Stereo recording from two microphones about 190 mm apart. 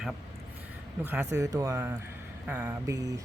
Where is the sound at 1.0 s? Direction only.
10° right (ahead or behind).